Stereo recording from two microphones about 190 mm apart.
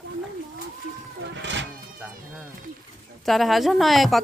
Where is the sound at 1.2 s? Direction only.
70° right (ahead or behind).